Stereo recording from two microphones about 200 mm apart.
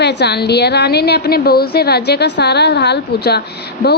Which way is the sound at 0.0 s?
55° left (ahead or behind).